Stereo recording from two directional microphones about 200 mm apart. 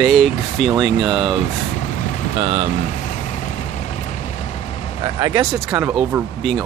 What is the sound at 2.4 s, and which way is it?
Speech, 35° right (ahead or behind).